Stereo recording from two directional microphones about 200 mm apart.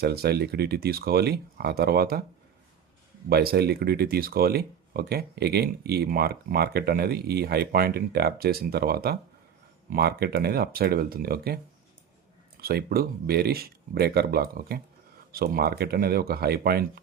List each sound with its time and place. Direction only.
0.0 s speech: 50° right (ahead or behind)
3.2 s speech: 50° right (ahead or behind)